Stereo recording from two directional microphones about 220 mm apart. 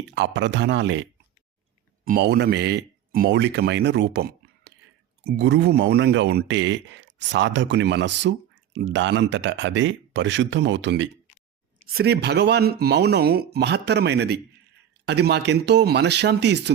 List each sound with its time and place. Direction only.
0.1 s speech: 55° right (ahead or behind)
2.0 s speech: 45° right (ahead or behind)